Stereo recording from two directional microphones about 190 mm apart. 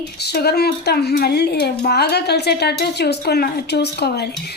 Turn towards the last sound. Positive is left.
turn(degrees=60)  # may be behind; listen again after turning